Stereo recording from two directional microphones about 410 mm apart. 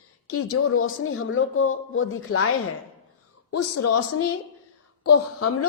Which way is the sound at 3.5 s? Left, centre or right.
Left.